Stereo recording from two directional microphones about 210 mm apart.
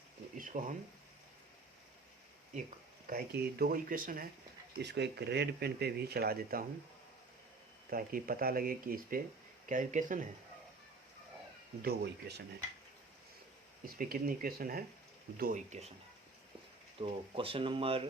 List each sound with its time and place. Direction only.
0.3 s a sound: 40° right (ahead or behind)
2.6 s speech: 45° right (ahead or behind)
4.8 s speech: 55° right (ahead or behind)
7.9 s speech: 45° right (ahead or behind)
11.8 s speech: 50° right (ahead or behind)
14.0 s speech: 45° right (ahead or behind)
17.0 s speech: 25° right (ahead or behind)